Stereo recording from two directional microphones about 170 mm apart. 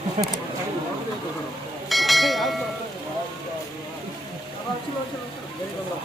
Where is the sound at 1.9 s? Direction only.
Centre (ahead or behind).